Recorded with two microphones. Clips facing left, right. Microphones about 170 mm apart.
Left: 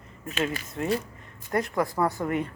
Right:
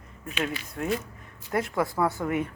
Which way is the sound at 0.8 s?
Centre (ahead or behind).